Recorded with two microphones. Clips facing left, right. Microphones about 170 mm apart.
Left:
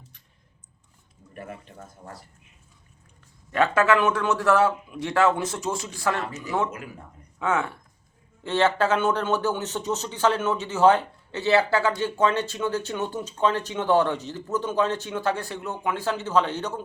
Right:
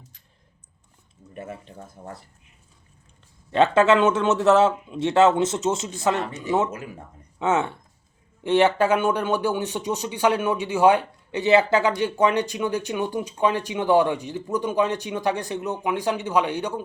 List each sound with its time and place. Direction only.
1.4 s speech: 25° right (ahead or behind)
3.5 s speech: 25° right (ahead or behind)